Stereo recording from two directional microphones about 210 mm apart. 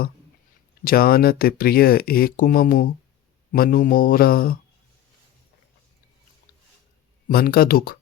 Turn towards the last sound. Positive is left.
turn(degrees=45)  # may be behind; listen again after turning